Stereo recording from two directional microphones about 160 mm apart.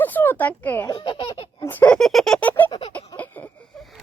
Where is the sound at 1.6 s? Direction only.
10° left (ahead or behind).